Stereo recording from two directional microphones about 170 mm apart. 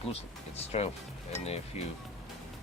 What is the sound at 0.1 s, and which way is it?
Speech, 40° left (ahead or behind).